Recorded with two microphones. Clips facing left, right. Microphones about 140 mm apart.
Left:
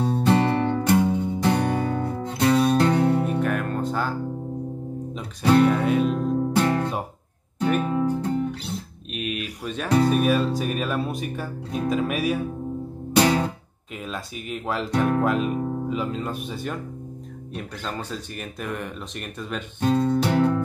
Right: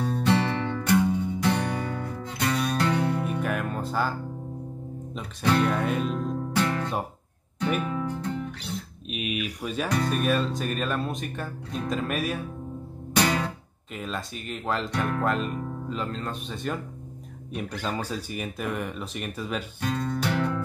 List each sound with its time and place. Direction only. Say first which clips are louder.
0.0 s music: left 4 dB; 35° left (ahead or behind)
3.4 s music: left 4 dB; 5° right (ahead or behind)
5.6 s music: left 6 dB; 5° left (ahead or behind)
6.0 s music: left 6 dB; 40° left (ahead or behind)
9.1 s a sound: left 1 dB; 5° right (ahead or behind)
10.0 s speech: left 5 dB; 5° left (ahead or behind)
13.2 s music: left 5 dB; 40° left (ahead or behind)
13.9 s speech: left 1 dB; centre (ahead or behind)
17.6 s speech: right 2 dB; 5° right (ahead or behind)
19.8 s music: left 9 dB; 35° left (ahead or behind)